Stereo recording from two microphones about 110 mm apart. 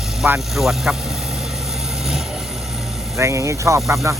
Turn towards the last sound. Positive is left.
turn(degrees=-30)  # may be behind; listen again after turning